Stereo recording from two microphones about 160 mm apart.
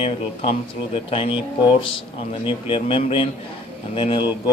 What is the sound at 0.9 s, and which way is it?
Speech, 35° left (ahead or behind).